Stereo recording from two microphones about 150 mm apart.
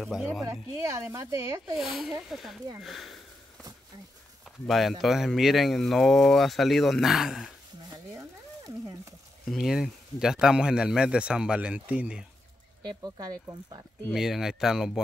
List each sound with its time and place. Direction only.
0.0 s speech: 5° right (ahead or behind)
0.4 s speech: 20° right (ahead or behind)
1.8 s speech: centre (ahead or behind)
4.6 s speech: centre (ahead or behind)
7.9 s a sound: 25° right (ahead or behind)
9.5 s speech: 5° right (ahead or behind)
12.8 s speech: 25° right (ahead or behind)
14.1 s speech: 5° right (ahead or behind)